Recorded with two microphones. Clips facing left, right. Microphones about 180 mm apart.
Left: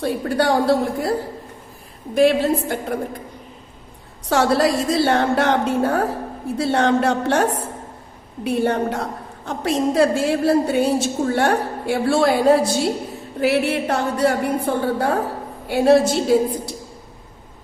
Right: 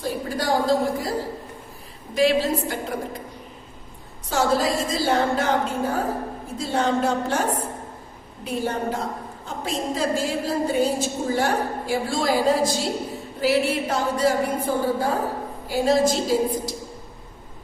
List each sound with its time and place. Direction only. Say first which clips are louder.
0.0 s a woman's voice: left 6 dB; 65° left (ahead or behind)
2.1 s a woman's voice: left 4 dB; 55° left (ahead or behind)
4.3 s a woman's voice: left 4 dB; 70° left (ahead or behind)